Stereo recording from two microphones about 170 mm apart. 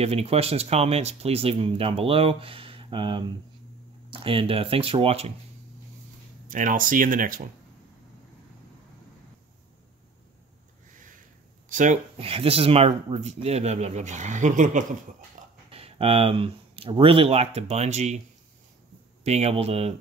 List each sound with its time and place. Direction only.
0.0 s speech: 35° right (ahead or behind)
6.5 s speech: 50° right (ahead or behind)
11.7 s speech: 45° right (ahead or behind)
15.7 s speech: 35° right (ahead or behind)
19.2 s speech: 40° right (ahead or behind)